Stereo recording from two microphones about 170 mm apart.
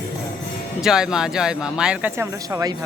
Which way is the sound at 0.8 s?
5° right (ahead or behind).